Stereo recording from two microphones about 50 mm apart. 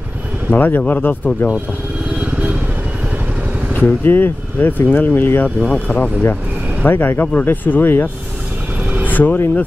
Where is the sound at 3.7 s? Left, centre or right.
Left.